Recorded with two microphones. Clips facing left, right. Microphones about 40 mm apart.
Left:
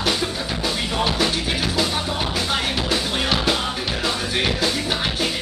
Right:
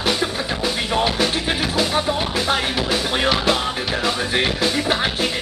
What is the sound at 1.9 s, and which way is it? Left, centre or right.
Music, centre.